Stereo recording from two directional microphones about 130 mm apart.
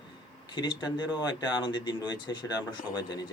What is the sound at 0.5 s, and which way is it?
Speech, 35° left (ahead or behind).